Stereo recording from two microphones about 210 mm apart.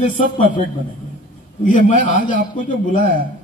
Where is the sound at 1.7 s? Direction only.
40° left (ahead or behind).